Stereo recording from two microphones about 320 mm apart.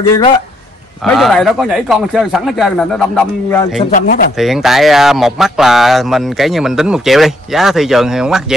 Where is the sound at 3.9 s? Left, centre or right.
Left.